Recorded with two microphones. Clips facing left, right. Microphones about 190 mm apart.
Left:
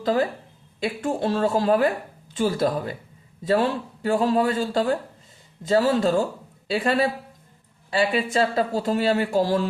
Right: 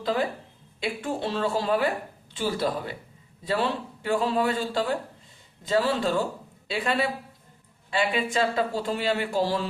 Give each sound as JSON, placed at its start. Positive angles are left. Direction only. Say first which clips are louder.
{"t": 0.8, "sound": "a man's voice", "louder": "left 4 dB", "side_deg": 45}